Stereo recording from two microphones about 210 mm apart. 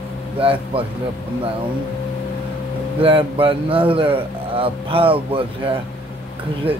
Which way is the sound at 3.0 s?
25° right (ahead or behind).